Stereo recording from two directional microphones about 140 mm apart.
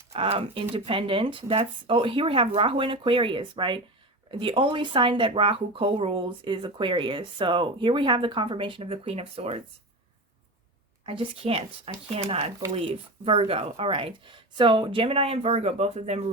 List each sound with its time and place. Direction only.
0.1 s speech: 45° right (ahead or behind)
11.0 s speech: 40° right (ahead or behind)